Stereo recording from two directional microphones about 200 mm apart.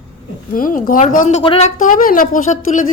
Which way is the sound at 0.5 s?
45° left (ahead or behind).